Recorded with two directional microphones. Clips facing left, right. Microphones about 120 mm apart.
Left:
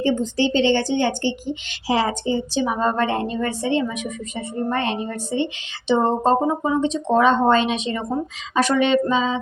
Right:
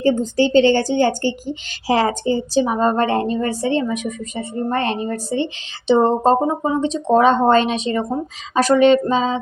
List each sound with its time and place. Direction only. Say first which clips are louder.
0.0 s speech: right 3 dB; 45° right (ahead or behind)